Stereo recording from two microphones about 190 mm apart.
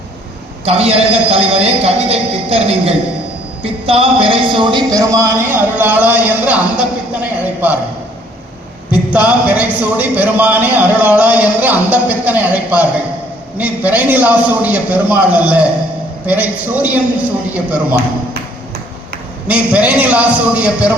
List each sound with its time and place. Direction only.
0.6 s a man's voice: 30° right (ahead or behind); by 7.8 s 10° right (ahead or behind)
9.1 s speech: 5° right (ahead or behind)
19.5 s speech: 5° right (ahead or behind)